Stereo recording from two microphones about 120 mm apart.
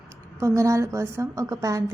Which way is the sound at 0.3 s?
25° right (ahead or behind).